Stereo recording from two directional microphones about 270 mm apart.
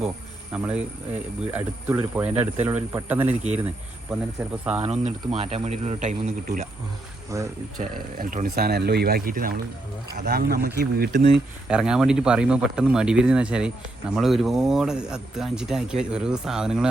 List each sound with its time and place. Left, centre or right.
0.5 s speech: centre
4.8 s a man's voice: right
7.3 s speech: centre
7.8 s speech: right
11.7 s speech: centre